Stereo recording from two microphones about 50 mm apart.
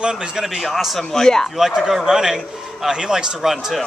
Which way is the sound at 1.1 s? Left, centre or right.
Centre.